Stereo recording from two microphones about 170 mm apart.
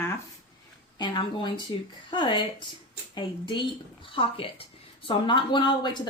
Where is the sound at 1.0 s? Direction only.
25° left (ahead or behind).